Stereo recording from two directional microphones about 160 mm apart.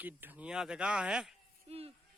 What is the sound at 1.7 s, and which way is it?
Speech, 40° right (ahead or behind).